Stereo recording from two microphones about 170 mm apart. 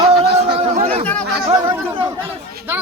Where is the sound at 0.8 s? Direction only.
40° right (ahead or behind).